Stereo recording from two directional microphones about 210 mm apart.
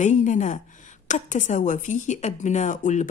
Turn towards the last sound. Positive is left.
turn(degrees=35)  # may be behind; listen again after turning